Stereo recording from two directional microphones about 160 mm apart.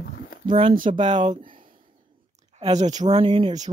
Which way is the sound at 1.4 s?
60° right (ahead or behind).